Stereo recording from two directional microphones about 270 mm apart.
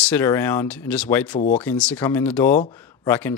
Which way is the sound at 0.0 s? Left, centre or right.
Centre.